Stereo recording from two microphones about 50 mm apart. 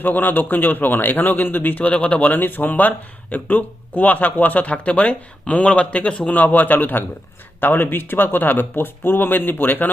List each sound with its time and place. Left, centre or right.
0.0 s a man's voice: left